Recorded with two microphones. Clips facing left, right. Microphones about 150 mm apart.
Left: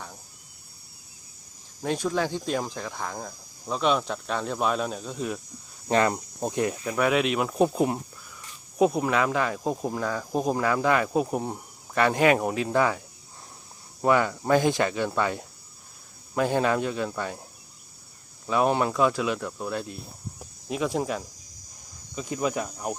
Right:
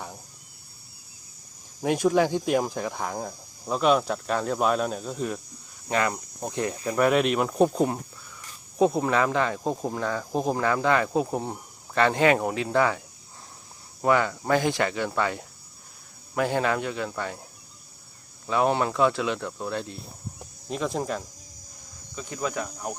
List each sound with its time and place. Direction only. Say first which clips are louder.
1.8 s speech: right 5 dB; 15° right (ahead or behind)
5.9 s speech: left 3 dB; 25° left (ahead or behind)
6.8 s speech: right 4 dB; centre (ahead or behind)
9.0 s speech: right 1 dB; 5° left (ahead or behind)
10.3 s speech: left 1 dB; 25° right (ahead or behind)
10.8 s speech: right 1 dB; 15° left (ahead or behind)
11.2 s speech: even; 20° right (ahead or behind)
11.9 s speech: even; 15° left (ahead or behind)
12.4 s speech: even; 20° right (ahead or behind)
12.7 s speech: right 1 dB; 15° left (ahead or behind)
14.0 s speech: even; 15° left (ahead or behind)
18.4 s speech: even; 20° left (ahead or behind)
20.7 s speech: left 1 dB; 5° left (ahead or behind)
22.1 s speech: left 3 dB; 15° left (ahead or behind)